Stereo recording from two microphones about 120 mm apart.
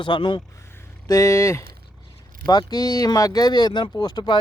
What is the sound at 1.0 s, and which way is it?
Speech, 25° left (ahead or behind).